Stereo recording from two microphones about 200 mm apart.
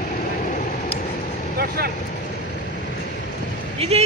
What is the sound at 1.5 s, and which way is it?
Speech, 50° right (ahead or behind).